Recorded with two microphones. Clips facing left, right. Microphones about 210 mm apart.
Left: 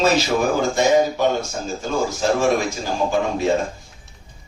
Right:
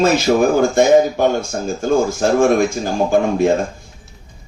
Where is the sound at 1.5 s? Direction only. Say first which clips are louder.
Right 8 dB; 55° right (ahead or behind).